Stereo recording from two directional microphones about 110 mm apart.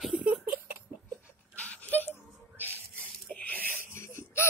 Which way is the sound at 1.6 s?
15° left (ahead or behind).